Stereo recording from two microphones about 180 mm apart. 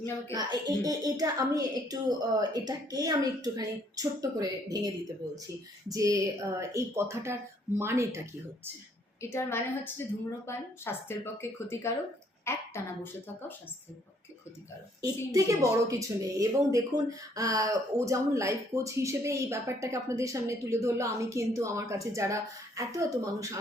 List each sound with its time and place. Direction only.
0.3 s a woman's voice: 20° right (ahead or behind)
5.9 s speech: 20° right (ahead or behind)
9.2 s speech: 15° left (ahead or behind)
15.0 s speech: 20° right (ahead or behind)